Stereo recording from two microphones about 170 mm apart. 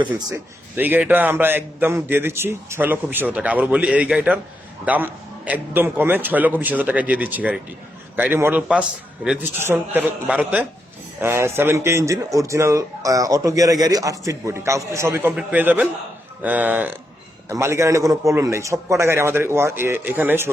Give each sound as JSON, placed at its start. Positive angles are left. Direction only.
{"t": 0.8, "sound": "a man's voice", "side_deg": -10}